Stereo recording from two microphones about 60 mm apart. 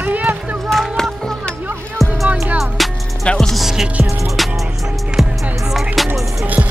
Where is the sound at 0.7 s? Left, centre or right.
Centre.